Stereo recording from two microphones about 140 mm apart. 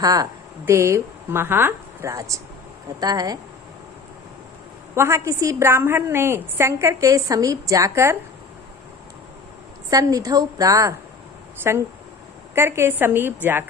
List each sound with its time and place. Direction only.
0.0 s a woman's voice: 25° right (ahead or behind)
4.9 s a woman's voice: 20° right (ahead or behind)
9.9 s a woman's voice: 25° right (ahead or behind)